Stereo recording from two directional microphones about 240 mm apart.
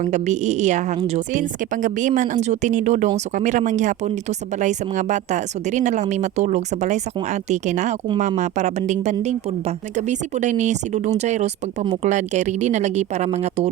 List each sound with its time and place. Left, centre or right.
0.0 s a woman's voice: right
8.0 s speech: centre